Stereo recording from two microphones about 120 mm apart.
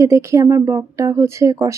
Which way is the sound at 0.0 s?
25° right (ahead or behind).